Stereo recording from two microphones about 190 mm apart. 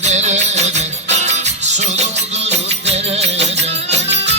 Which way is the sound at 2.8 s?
35° right (ahead or behind).